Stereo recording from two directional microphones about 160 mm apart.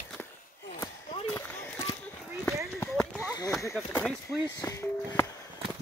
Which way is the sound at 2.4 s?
15° left (ahead or behind).